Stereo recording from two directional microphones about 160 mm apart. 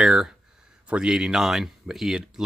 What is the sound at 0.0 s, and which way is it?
Speech, 5° right (ahead or behind).